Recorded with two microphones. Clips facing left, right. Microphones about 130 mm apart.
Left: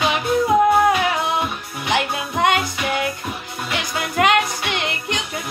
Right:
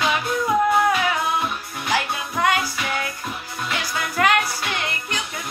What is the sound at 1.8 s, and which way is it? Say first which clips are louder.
Music: left 3 dB; 20° left (ahead or behind).